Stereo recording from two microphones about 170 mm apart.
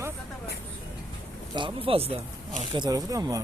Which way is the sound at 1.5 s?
30° right (ahead or behind).